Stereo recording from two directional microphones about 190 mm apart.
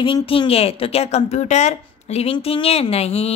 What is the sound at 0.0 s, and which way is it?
A woman's voice, 25° left (ahead or behind).